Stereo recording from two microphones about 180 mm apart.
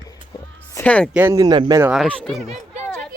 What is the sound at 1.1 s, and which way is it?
Speech, 10° right (ahead or behind).